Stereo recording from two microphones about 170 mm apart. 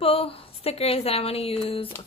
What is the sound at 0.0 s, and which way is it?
A woman's voice, 35° left (ahead or behind).